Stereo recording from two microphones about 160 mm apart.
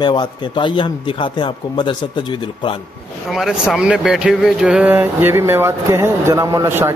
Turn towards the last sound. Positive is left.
turn(degrees=-15)  # may be behind; listen again after turning